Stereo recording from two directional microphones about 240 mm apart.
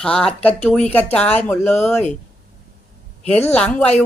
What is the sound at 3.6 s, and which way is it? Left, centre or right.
Speech, centre.